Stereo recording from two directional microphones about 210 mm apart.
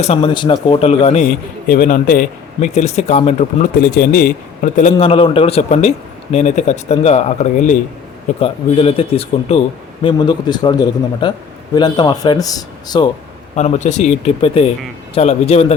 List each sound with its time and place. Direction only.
0.0 s speech: 25° left (ahead or behind)
3.9 s speech: 45° left (ahead or behind); by 13.1 s 20° left (ahead or behind)
13.6 s speech: 35° left (ahead or behind)